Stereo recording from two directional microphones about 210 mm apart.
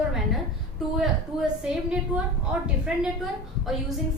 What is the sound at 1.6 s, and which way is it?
A woman's voice, 5° right (ahead or behind).